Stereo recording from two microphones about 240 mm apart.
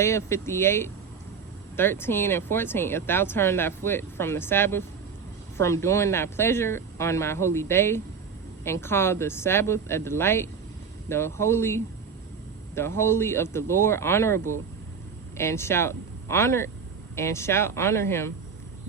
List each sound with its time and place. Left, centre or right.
0.0 s speech: centre
13.0 s speech: centre